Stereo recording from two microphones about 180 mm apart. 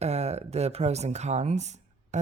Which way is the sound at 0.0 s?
35° right (ahead or behind).